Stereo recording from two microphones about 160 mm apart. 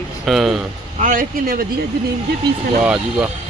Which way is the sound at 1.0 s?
55° right (ahead or behind).